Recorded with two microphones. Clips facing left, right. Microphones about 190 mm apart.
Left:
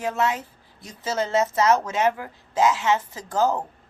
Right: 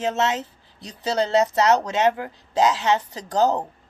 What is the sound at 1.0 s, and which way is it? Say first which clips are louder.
Speech: right 3 dB; 35° right (ahead or behind).